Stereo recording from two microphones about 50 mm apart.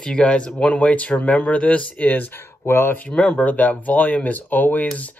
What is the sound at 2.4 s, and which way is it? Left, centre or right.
Speech, left.